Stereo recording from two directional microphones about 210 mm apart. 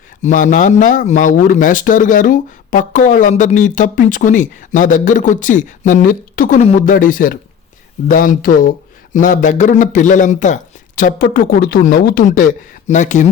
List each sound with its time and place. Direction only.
0.2 s speech: 35° left (ahead or behind)